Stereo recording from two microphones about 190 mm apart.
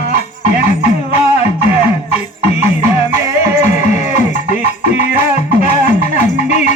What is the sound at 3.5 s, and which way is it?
Music, 40° left (ahead or behind).